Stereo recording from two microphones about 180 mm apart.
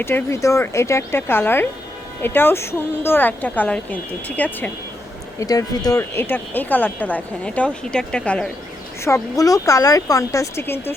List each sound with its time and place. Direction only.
0.0 s speech: 10° left (ahead or behind)
5.4 s speech: 20° left (ahead or behind)
9.0 s speech: 15° left (ahead or behind)